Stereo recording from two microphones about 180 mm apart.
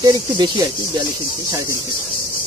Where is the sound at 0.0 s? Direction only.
20° right (ahead or behind).